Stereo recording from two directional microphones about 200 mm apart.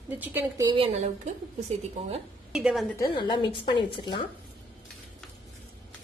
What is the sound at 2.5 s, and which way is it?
Speech, 5° right (ahead or behind).